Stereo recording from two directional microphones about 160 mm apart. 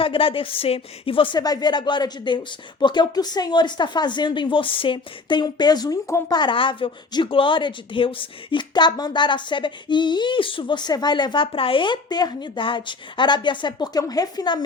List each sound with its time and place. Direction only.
0.0 s a woman's voice: 35° left (ahead or behind)